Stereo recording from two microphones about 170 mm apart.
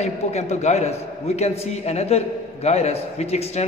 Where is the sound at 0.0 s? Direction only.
40° left (ahead or behind).